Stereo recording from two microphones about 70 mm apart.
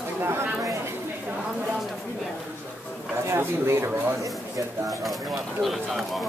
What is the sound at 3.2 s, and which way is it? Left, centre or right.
Speech, right.